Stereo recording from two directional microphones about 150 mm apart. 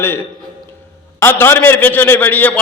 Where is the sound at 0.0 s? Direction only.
15° left (ahead or behind).